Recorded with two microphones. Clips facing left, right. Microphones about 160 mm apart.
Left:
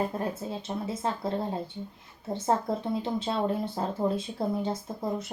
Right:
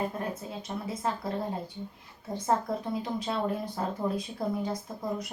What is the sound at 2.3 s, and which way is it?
Speech, 25° left (ahead or behind).